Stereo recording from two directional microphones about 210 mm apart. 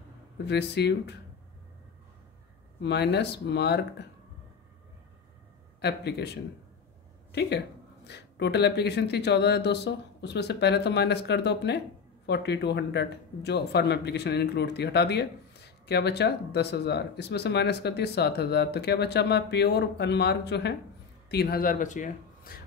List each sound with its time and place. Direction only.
0.5 s speech: 55° left (ahead or behind)
2.8 s speech: 55° left (ahead or behind)
5.8 s speech: 50° left (ahead or behind)